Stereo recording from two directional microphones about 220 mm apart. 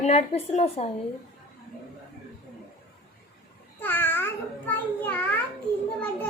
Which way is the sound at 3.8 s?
10° left (ahead or behind).